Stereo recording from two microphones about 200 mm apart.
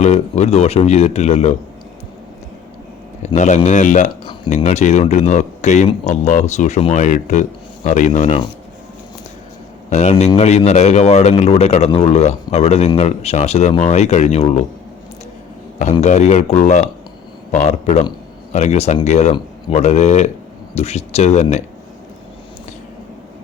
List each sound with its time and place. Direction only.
0.0 s speech: 30° left (ahead or behind)
3.2 s speech: 35° left (ahead or behind)
9.9 s speech: 35° left (ahead or behind)
15.8 s speech: 35° left (ahead or behind)
19.3 s a man's voice: 25° left (ahead or behind)
19.8 s speech: 35° left (ahead or behind)